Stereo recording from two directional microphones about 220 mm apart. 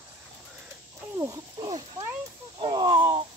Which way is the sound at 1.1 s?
15° right (ahead or behind).